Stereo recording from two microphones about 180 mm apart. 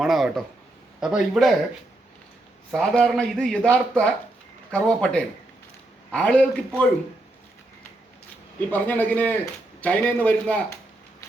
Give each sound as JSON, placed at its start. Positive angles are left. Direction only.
{"t": 0.0, "sound": "speech", "side_deg": 0}
{"t": 2.7, "sound": "speech", "side_deg": 5}
{"t": 8.7, "sound": "a man's voice", "side_deg": 10}